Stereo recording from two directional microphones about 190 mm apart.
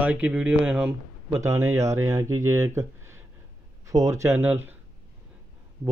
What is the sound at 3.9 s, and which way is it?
Speech, 15° right (ahead or behind).